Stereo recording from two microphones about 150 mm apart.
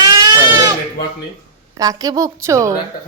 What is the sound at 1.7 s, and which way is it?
Speech, 25° right (ahead or behind).